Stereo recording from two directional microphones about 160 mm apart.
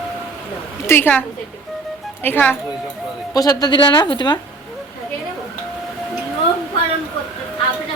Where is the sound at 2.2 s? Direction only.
10° left (ahead or behind).